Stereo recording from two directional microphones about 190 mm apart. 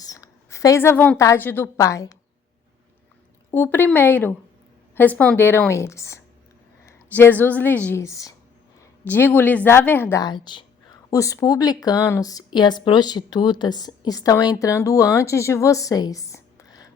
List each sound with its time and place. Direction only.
0.0 s a woman's voice: 20° left (ahead or behind)
3.5 s a woman's voice: 10° left (ahead or behind)